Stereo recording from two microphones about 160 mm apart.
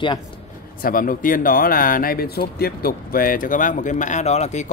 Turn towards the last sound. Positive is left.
turn(degrees=45)  # may be behind; listen again after turning